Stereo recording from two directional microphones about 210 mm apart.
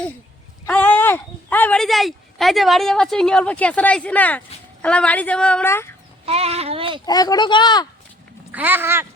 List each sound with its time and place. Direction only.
0.7 s speech: 10° left (ahead or behind)
6.2 s speech: 30° right (ahead or behind)
7.0 s speech: 20° left (ahead or behind)
8.5 s speech: 10° right (ahead or behind)